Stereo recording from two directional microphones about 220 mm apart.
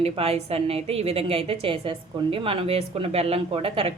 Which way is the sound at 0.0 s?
25° right (ahead or behind).